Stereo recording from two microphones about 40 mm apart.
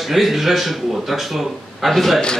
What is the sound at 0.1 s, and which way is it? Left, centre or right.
Speech, centre.